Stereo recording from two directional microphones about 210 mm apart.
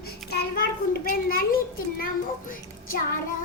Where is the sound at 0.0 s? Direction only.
50° left (ahead or behind).